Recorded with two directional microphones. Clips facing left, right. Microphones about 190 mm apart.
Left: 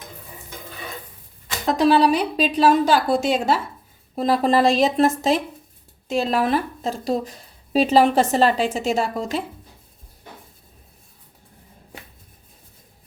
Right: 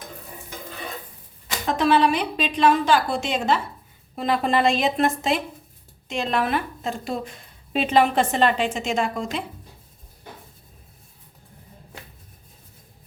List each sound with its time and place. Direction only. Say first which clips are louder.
1.6 s speech: left 3 dB; 35° left (ahead or behind)